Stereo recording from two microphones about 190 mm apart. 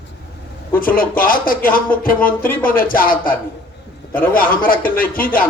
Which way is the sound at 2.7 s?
50° left (ahead or behind).